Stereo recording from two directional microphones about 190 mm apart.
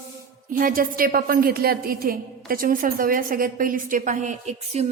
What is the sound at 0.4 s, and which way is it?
A woman's voice, 45° right (ahead or behind).